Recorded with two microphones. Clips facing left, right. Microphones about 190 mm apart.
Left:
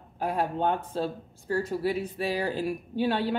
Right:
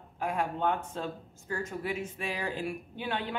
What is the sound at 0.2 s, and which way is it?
Speech, 35° left (ahead or behind).